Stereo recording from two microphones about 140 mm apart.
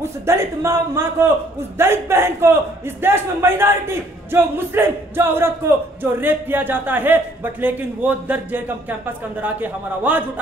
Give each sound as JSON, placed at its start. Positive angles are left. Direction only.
{"t": 0.0, "sound": "a man's voice", "side_deg": -20}